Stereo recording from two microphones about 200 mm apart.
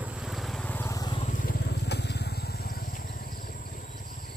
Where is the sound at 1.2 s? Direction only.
40° left (ahead or behind).